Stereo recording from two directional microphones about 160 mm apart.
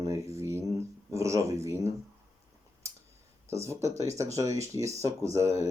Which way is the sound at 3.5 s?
15° right (ahead or behind).